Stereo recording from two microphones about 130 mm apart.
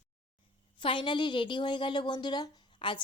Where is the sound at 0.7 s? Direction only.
40° left (ahead or behind).